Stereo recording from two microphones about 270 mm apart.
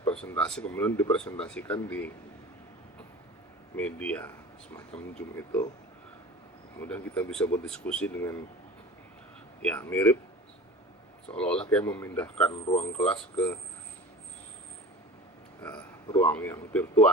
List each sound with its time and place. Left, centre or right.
0.0 s speech: centre
3.8 s speech: centre
6.7 s speech: centre
9.6 s speech: centre
11.3 s speech: centre
12.6 s speech: left
12.9 s speech: centre
16.0 s speech: centre